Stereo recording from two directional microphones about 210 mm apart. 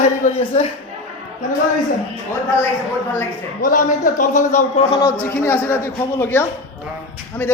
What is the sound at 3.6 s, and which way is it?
A man's voice, 40° left (ahead or behind).